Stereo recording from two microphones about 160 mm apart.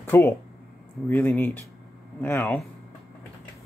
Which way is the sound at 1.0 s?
10° left (ahead or behind).